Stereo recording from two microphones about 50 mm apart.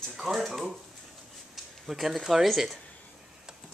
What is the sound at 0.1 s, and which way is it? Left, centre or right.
Speech, centre.